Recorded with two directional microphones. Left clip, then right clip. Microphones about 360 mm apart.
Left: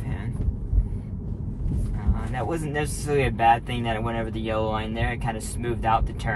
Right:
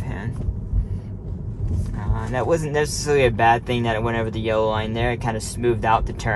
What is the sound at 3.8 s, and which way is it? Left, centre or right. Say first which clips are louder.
Speech: right 5 dB; right.